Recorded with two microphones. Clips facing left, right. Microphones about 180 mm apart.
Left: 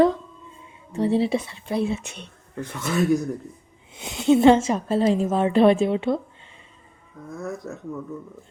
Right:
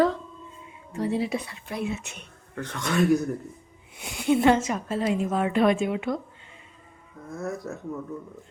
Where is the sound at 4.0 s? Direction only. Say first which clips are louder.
Left 5 dB; 20° left (ahead or behind).